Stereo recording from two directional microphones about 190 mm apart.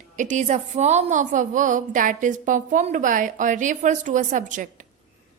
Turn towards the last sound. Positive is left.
turn(degrees=-40)  # may be behind; listen again after turning